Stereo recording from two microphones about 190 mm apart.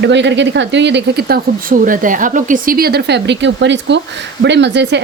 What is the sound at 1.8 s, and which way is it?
Speech, 45° right (ahead or behind).